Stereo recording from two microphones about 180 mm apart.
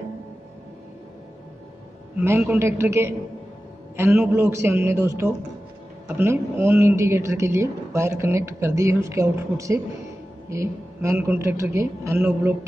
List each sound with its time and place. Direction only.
2.1 s speech: 10° right (ahead or behind)